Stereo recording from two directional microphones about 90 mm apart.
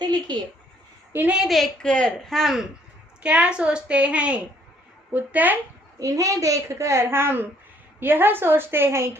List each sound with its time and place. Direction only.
0.0 s a sound: 55° right (ahead or behind)
1.3 s a woman's voice: 5° right (ahead or behind)
3.2 s a woman's voice: 10° right (ahead or behind)
6.0 s a woman's voice: 40° right (ahead or behind)